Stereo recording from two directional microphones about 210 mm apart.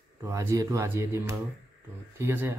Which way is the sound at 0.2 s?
15° right (ahead or behind).